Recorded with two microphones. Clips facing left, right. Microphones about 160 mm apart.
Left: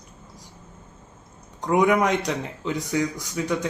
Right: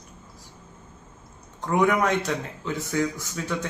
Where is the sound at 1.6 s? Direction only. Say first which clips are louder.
Left 2 dB; 15° left (ahead or behind).